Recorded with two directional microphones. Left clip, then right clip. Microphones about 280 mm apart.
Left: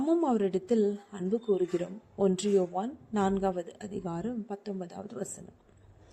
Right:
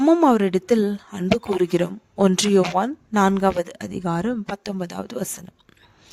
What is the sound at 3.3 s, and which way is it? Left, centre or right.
A woman's voice, right.